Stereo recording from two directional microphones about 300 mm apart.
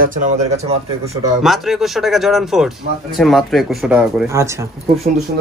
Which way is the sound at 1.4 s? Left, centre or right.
Centre.